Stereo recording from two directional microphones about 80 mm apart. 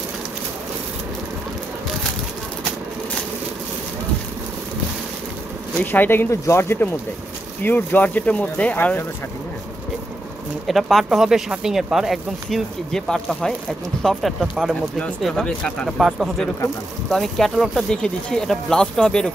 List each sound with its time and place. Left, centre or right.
5.8 s speech: left
10.7 s speech: centre
12.4 s speech: centre
16.0 s speech: centre
17.1 s speech: centre